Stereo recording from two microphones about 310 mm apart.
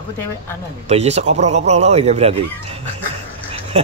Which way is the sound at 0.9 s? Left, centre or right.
Right.